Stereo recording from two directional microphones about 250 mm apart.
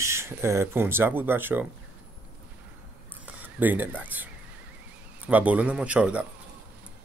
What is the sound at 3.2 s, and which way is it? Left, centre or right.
Speech, centre.